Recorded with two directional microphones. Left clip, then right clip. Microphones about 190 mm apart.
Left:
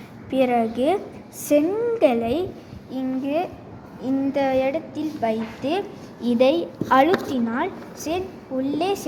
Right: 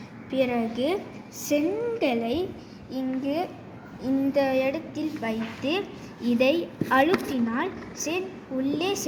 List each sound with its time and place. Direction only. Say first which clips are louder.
0.3 s a woman's voice: left 6 dB; 30° left (ahead or behind)